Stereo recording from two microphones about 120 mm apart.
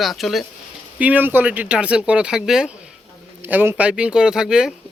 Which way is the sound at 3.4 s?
15° right (ahead or behind).